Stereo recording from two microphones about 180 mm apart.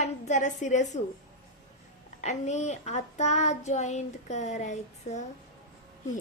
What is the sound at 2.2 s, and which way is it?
A child's voice, 40° left (ahead or behind).